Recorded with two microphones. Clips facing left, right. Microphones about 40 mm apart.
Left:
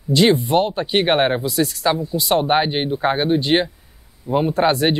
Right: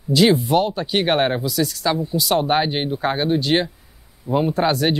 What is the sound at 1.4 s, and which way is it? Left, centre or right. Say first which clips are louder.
Speech: left 2 dB; left.